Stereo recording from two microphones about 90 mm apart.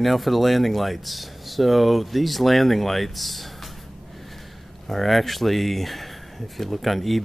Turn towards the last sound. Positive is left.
turn(degrees=0)  # may be behind; listen again after turning